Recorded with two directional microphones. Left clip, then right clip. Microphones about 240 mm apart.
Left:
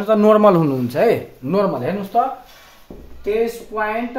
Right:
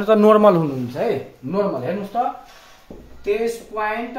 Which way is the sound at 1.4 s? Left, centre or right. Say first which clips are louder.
Left 9 dB; left.